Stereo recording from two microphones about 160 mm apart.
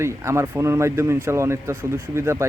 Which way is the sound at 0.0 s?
15° right (ahead or behind).